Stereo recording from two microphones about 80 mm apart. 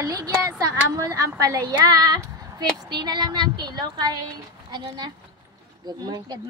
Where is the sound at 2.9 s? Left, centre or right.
Right.